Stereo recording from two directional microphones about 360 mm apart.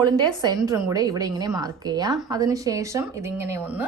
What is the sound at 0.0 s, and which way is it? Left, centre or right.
A woman's voice, centre.